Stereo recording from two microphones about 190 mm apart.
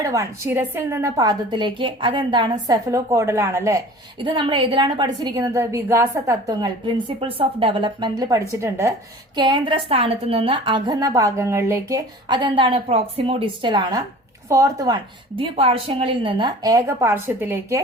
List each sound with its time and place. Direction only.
0.0 s a woman's voice: 15° right (ahead or behind)
4.2 s a woman's voice: 25° right (ahead or behind)
15.4 s a woman's voice: 30° right (ahead or behind); by 17.8 s 15° right (ahead or behind)